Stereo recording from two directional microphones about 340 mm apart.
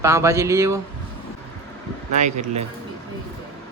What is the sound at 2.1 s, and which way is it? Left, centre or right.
Speech, right.